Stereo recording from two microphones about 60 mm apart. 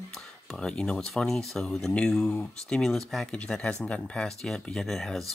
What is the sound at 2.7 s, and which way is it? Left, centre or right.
Speech, centre.